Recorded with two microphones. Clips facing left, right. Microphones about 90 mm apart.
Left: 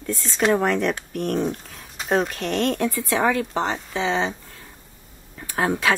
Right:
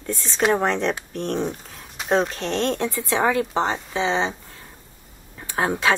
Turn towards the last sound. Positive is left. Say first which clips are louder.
# even
turn(degrees=-25)  # may be behind; listen again after turning